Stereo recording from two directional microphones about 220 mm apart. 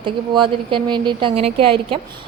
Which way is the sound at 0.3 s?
20° right (ahead or behind).